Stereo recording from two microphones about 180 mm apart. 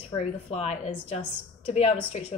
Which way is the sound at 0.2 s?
35° left (ahead or behind).